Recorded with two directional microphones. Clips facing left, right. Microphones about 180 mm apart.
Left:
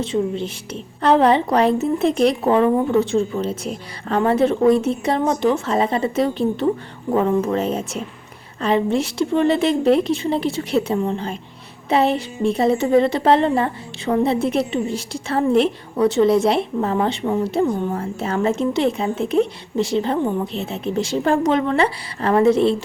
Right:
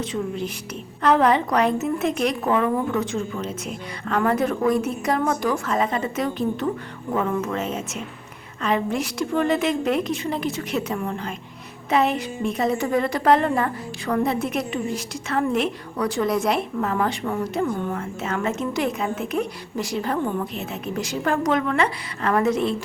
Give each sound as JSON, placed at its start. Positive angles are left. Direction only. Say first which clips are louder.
{"t": 0.0, "sound": "a woman's voice", "louder": "left 5 dB", "side_deg": 30}